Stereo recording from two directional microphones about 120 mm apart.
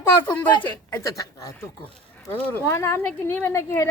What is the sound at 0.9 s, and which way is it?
Speech, 25° left (ahead or behind).